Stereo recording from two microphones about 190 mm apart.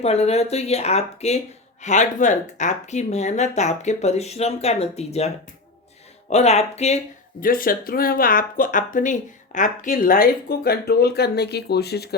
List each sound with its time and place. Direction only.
0.0 s speech: 35° left (ahead or behind)
6.3 s speech: 35° left (ahead or behind)
7.4 s speech: 50° left (ahead or behind)